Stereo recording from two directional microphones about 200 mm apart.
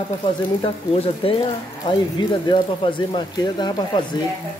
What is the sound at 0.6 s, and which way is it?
Speech, 25° left (ahead or behind).